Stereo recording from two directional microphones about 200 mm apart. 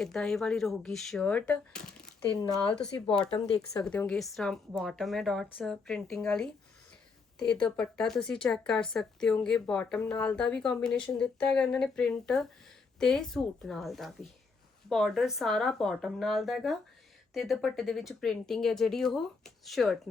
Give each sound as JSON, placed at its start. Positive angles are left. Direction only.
{"t": 0.0, "sound": "speech", "side_deg": 0}
{"t": 3.2, "sound": "speech", "side_deg": 25}
{"t": 3.8, "sound": "speech", "side_deg": 5}